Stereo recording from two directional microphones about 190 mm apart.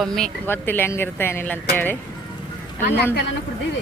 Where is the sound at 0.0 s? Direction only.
5° left (ahead or behind).